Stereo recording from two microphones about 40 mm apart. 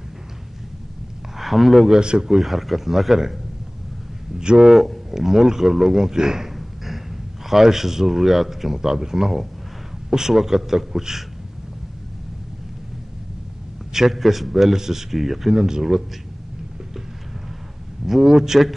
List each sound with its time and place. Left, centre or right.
1.4 s speech: centre
1.9 s a man's voice: right
2.3 s a man's voice: centre
4.4 s a man's voice: centre
4.6 s a man's voice: centre
6.5 s a sound: centre
7.4 s a man's voice: centre
13.9 s a man's voice: centre
18.0 s a man's voice: centre